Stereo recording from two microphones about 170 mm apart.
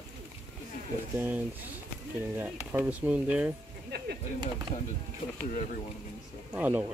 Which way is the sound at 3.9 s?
75° right (ahead or behind).